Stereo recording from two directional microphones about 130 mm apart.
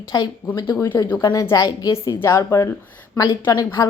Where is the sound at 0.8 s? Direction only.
20° left (ahead or behind).